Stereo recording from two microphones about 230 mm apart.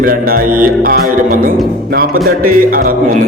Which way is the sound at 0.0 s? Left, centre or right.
Right.